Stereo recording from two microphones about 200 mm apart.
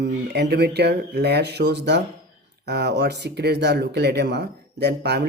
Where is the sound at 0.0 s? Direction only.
55° right (ahead or behind).